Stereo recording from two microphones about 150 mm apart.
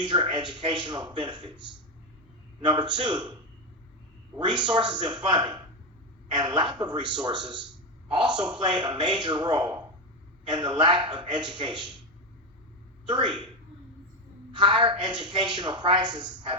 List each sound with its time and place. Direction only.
0.1 s speech: 30° right (ahead or behind)
2.6 s a woman's voice: 30° right (ahead or behind)
4.4 s a woman's voice: 30° right (ahead or behind)
13.1 s a woman's voice: 30° right (ahead or behind)
14.5 s a woman's voice: 30° right (ahead or behind)